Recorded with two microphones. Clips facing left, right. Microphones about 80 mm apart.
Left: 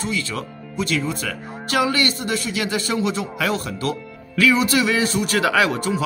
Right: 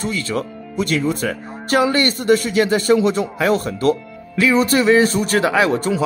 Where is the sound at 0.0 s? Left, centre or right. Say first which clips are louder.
Right 4 dB; right.